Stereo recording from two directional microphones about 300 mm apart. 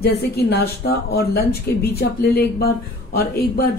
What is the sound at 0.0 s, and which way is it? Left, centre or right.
A woman's voice, left.